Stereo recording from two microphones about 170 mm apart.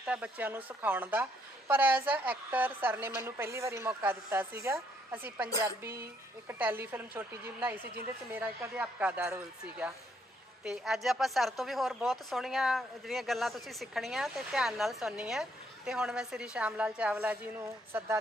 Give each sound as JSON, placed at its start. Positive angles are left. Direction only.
{"t": 0.0, "sound": "a woman's voice", "side_deg": -5}
{"t": 6.5, "sound": "speech", "side_deg": -10}